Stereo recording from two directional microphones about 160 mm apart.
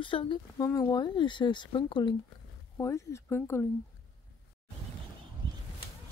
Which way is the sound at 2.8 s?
20° left (ahead or behind).